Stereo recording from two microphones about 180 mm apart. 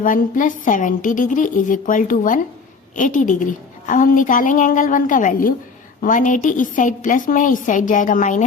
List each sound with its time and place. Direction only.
0.0 s a woman's voice: 45° left (ahead or behind)